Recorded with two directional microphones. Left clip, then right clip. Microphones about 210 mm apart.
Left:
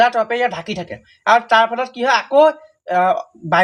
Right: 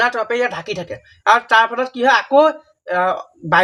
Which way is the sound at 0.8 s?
50° right (ahead or behind).